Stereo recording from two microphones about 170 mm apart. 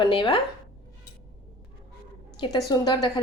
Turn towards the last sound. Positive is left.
turn(degrees=25)  # may be behind; listen again after turning